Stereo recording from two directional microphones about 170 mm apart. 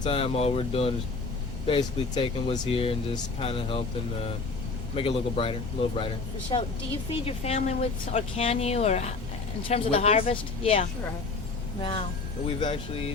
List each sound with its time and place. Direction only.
0.0 s speech: 35° left (ahead or behind)